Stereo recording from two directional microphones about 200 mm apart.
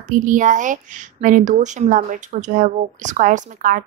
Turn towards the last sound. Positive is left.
turn(degrees=-40)  # may be behind; listen again after turning